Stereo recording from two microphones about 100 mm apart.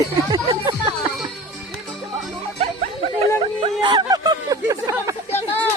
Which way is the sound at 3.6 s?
50° right (ahead or behind).